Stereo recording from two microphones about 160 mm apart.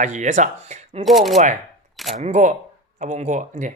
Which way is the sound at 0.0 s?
50° right (ahead or behind).